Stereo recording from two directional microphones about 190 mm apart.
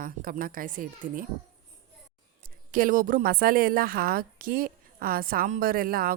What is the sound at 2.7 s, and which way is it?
A woman's voice, 45° right (ahead or behind).